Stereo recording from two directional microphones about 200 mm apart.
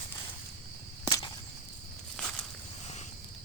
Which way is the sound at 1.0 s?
25° left (ahead or behind).